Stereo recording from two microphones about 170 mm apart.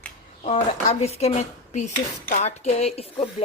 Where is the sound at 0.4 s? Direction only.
40° left (ahead or behind).